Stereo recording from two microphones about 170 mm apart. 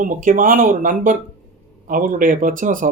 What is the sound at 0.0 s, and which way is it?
Speech, 55° right (ahead or behind).